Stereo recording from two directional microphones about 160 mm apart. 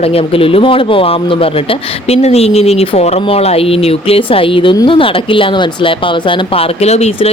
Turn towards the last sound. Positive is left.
turn(degrees=40)  # may be behind; listen again after turning